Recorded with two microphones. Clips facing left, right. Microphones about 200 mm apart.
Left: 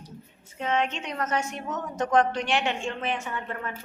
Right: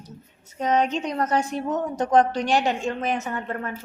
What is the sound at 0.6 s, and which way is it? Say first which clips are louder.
A woman's voice: right 5 dB; 40° right (ahead or behind).